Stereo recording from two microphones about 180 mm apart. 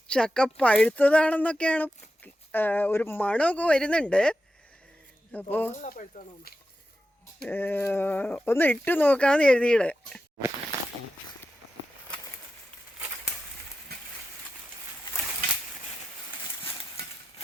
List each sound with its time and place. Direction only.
0.1 s speech: 5° left (ahead or behind)
5.8 s speech: 45° left (ahead or behind)
7.4 s speech: 10° left (ahead or behind)